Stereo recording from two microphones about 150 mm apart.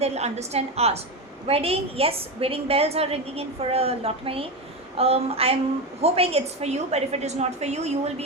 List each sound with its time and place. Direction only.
0.0 s a woman's voice: 45° right (ahead or behind)